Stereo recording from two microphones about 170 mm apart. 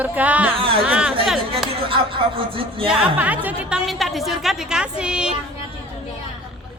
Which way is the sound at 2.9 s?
10° right (ahead or behind).